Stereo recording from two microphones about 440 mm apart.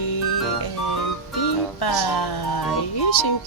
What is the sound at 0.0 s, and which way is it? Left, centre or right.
Music, left.